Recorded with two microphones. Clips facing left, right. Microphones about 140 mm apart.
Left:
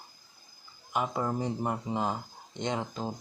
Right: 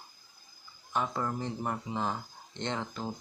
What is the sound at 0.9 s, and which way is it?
Speech, 15° left (ahead or behind).